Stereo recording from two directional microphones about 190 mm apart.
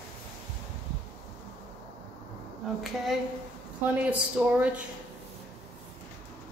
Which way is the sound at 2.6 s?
Centre (ahead or behind).